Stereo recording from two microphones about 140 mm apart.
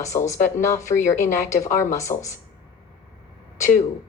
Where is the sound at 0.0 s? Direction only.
20° left (ahead or behind).